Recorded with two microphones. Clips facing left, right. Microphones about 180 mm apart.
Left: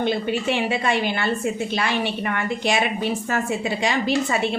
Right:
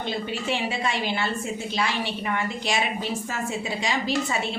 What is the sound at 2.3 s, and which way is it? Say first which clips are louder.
Speech: left 3 dB; 60° left (ahead or behind).